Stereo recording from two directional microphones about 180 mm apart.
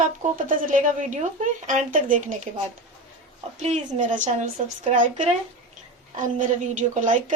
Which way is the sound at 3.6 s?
40° right (ahead or behind).